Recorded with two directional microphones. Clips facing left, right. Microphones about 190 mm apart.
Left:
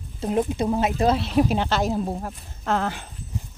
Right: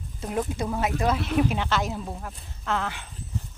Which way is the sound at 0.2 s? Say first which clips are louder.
Left 5 dB; 25° left (ahead or behind).